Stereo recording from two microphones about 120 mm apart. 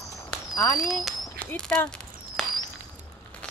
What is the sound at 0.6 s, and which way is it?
Speech, 30° left (ahead or behind).